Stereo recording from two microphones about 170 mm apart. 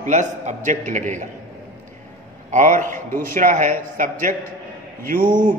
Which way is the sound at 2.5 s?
45° right (ahead or behind).